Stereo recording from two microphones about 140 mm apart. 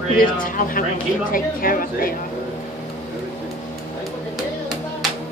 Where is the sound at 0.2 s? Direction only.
85° left.